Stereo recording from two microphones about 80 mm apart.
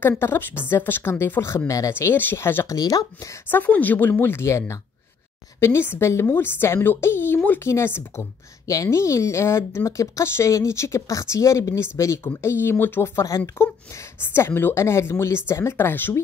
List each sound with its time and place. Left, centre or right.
0.2 s a woman's voice: left
1.7 s speech: left
2.0 s speech: left
2.7 s speech: left
3.4 s a woman's voice: left
8.6 s speech: left